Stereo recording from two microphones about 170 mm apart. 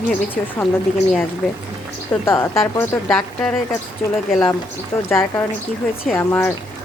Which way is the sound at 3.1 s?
5° left (ahead or behind).